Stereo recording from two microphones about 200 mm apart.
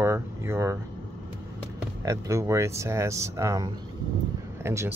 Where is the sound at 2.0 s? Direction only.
15° right (ahead or behind).